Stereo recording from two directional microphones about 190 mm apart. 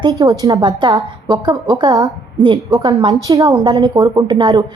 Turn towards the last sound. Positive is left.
turn(degrees=-25)  # may be behind; listen again after turning